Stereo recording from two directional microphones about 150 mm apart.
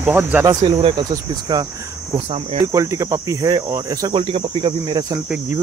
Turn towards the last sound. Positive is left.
turn(degrees=-25)  # may be behind; listen again after turning